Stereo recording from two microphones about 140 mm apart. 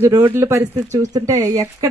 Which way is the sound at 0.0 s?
15° right (ahead or behind).